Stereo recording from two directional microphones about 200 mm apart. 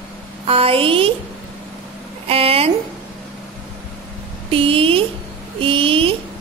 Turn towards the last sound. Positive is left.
turn(degrees=-25)  # may be behind; listen again after turning